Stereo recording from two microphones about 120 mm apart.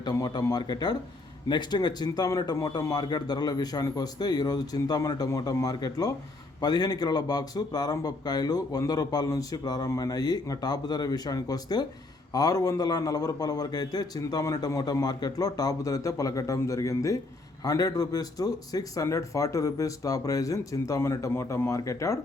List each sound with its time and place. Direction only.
0.0 s speech: 30° left (ahead or behind)